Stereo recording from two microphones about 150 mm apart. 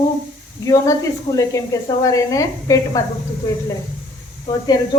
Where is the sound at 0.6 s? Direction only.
20° left (ahead or behind).